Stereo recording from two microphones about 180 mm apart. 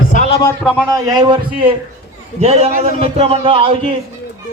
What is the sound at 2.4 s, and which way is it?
Speech, 35° right (ahead or behind).